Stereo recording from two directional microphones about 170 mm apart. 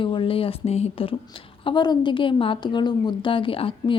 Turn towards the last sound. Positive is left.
turn(degrees=30)  # may be behind; listen again after turning